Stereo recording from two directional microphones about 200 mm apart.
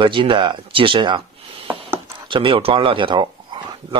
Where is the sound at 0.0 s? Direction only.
25° right (ahead or behind).